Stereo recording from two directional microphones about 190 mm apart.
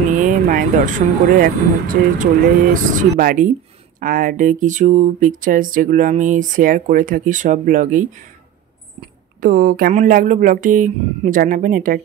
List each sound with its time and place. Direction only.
0.1 s speech: 40° right (ahead or behind)
9.4 s speech: 45° right (ahead or behind)